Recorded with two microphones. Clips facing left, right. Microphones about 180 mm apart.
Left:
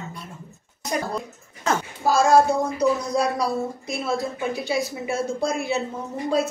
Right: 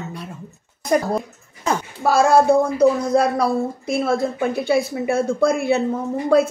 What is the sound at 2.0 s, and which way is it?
Speech, 60° right (ahead or behind).